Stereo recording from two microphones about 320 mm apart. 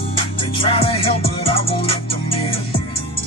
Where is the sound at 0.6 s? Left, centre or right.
Centre.